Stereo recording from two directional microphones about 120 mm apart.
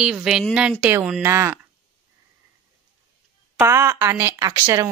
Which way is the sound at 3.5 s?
25° right (ahead or behind).